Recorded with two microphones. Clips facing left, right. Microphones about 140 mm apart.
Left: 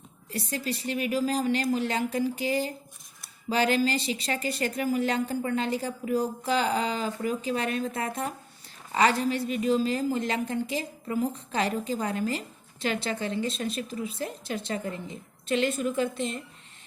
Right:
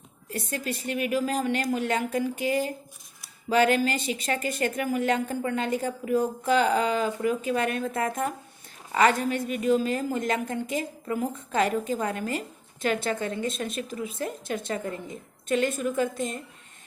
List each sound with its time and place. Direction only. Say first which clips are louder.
0.3 s a woman's voice: even; 45° right (ahead or behind)